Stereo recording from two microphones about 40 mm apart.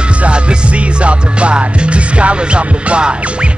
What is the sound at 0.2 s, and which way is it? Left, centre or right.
Music, right.